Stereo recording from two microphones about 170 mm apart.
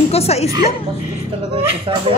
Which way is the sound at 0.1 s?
40° left (ahead or behind).